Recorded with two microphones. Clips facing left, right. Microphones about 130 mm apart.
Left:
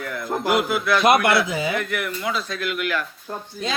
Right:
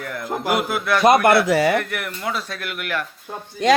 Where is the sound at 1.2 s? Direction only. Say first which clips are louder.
Right 5 dB; 60° right (ahead or behind).